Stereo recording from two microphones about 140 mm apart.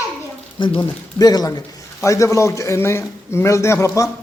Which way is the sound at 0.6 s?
35° left (ahead or behind).